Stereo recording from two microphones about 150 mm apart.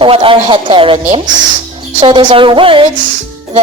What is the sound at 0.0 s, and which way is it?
Speech, 35° right (ahead or behind).